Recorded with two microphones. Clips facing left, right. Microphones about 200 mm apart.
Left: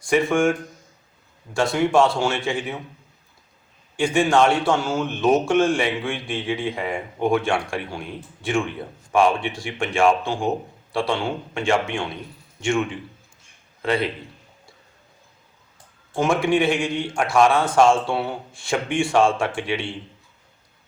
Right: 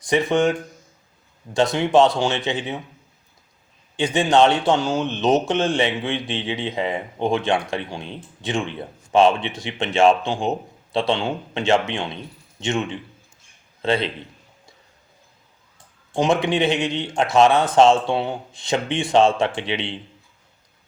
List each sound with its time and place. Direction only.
0.0 s a man's voice: 20° right (ahead or behind)
1.5 s a man's voice: 20° right (ahead or behind)
3.9 s a man's voice: 20° right (ahead or behind)
16.1 s a man's voice: 20° right (ahead or behind)